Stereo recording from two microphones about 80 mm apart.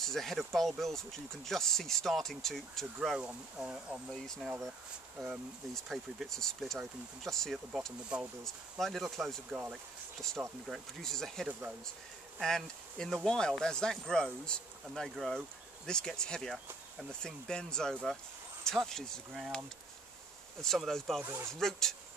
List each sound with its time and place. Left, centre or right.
0.0 s speech: centre
3.2 s speech: centre
4.4 s speech: centre
8.1 s speech: centre
8.5 s speech: centre
10.7 s speech: centre
20.6 s speech: centre
21.2 s speech: right
21.5 s speech: centre